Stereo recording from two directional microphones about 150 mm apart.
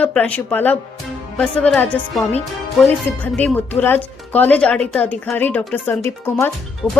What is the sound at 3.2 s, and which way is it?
Speech, 10° left (ahead or behind).